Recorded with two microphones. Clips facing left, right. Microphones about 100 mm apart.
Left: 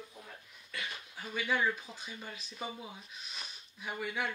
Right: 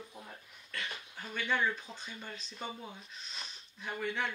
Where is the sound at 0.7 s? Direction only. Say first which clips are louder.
Even; 5° left (ahead or behind).